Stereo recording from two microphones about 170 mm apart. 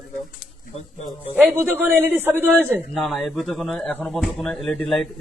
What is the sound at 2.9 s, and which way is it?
Speech, centre (ahead or behind).